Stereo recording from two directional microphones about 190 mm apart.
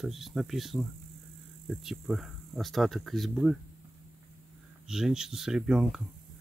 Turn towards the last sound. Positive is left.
turn(degrees=-5)  # may be behind; listen again after turning